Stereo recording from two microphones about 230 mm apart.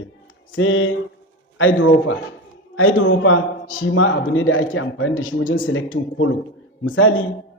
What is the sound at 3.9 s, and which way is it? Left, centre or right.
A man's voice, left.